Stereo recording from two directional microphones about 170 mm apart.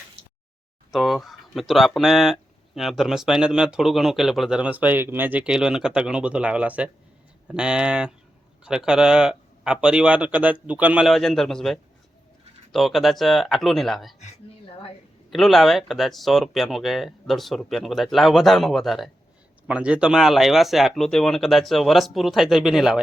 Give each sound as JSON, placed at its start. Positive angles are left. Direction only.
{"t": 0.9, "sound": "speech", "side_deg": 0}
{"t": 14.7, "sound": "a sound", "side_deg": 35}
{"t": 15.3, "sound": "speech", "side_deg": 0}